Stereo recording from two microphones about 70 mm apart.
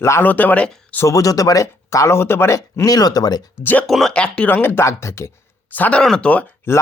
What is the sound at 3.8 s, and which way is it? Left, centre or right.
Speech, centre.